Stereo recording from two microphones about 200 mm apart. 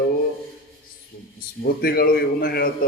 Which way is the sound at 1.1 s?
45° left (ahead or behind).